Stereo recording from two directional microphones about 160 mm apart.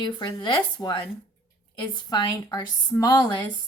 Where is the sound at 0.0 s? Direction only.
30° left (ahead or behind).